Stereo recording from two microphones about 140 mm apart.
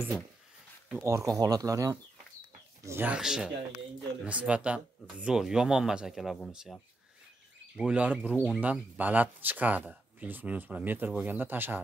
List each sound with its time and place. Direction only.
1.0 s speech: 20° right (ahead or behind)